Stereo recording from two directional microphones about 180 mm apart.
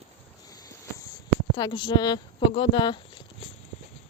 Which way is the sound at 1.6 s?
25° left (ahead or behind).